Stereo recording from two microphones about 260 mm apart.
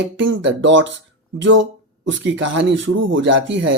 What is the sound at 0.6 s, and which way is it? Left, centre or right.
Speech, right.